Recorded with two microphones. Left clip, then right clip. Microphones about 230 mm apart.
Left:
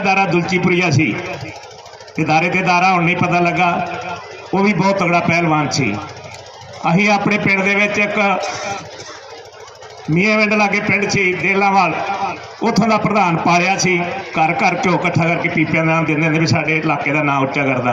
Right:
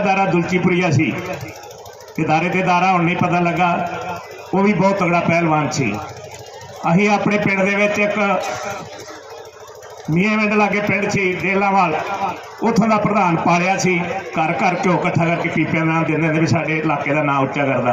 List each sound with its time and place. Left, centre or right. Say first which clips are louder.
0.0 s a man's voice: left 2 dB; left
2.1 s a man's voice: left 2 dB; left
6.8 s a man's voice: left 2 dB; left
10.2 s a man's voice: left 3 dB; left